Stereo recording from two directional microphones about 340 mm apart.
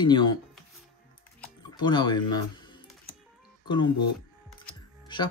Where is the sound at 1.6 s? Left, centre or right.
Centre.